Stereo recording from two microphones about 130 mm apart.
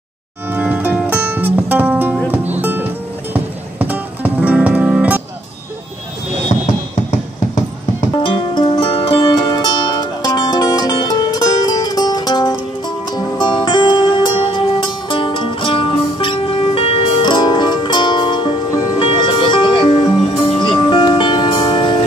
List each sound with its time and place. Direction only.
0.5 s music: 10° right (ahead or behind)
8.1 s music: 40° left (ahead or behind)
9.9 s music: 30° left (ahead or behind)